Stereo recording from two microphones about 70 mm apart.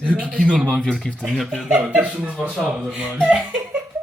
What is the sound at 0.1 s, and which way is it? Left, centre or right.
Speech, centre.